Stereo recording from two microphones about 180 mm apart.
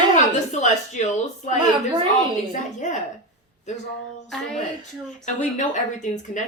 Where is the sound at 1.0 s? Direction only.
40° left (ahead or behind).